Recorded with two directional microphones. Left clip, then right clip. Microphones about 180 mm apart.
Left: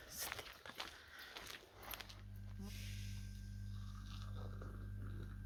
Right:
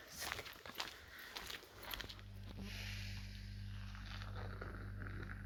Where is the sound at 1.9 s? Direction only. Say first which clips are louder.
Right 4 dB; 30° right (ahead or behind).